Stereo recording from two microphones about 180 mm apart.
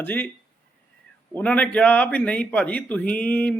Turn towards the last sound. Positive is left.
turn(degrees=10)  # may be behind; listen again after turning